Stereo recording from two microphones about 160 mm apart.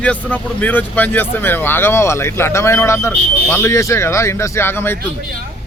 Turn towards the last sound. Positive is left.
turn(degrees=15)  # may be behind; listen again after turning